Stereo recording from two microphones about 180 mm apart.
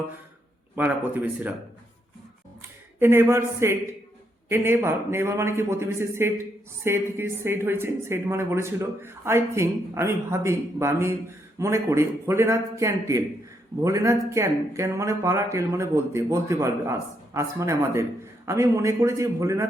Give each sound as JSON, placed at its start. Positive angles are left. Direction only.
{"t": 0.8, "sound": "a woman's voice", "side_deg": -10}
{"t": 2.6, "sound": "a woman's voice", "side_deg": -15}